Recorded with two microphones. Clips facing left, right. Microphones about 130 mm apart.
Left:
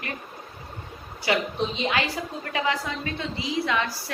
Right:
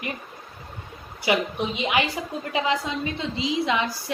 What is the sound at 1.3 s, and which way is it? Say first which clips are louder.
A woman's voice: right 1 dB; 20° right (ahead or behind).